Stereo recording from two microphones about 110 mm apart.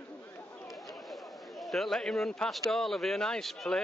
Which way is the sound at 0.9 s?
Centre (ahead or behind).